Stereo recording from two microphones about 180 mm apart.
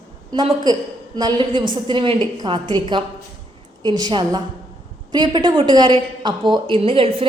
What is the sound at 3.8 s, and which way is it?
A woman's voice, 25° right (ahead or behind).